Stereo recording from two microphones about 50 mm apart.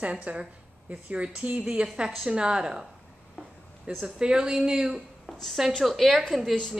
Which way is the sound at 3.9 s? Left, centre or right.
Right.